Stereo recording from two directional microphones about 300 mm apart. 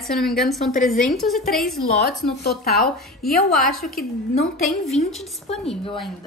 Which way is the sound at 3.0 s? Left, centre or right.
Centre.